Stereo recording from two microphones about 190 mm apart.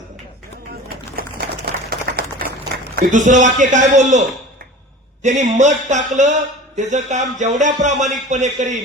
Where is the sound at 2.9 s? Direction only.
45° right (ahead or behind).